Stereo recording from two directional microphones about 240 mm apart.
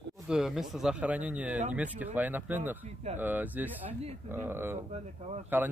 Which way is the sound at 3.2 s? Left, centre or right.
Centre.